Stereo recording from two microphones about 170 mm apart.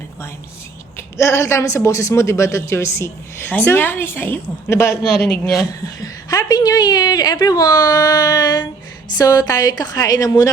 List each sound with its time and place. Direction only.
1.1 s a woman's voice: 15° left (ahead or behind)